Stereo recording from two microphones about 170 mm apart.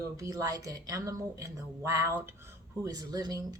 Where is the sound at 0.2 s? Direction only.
20° right (ahead or behind).